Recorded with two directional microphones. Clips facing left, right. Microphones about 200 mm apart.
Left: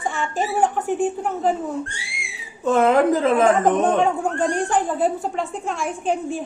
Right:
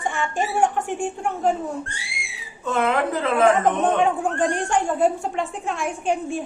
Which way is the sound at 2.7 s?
40° left (ahead or behind).